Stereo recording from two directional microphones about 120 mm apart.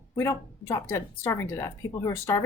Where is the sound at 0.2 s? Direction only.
25° left (ahead or behind).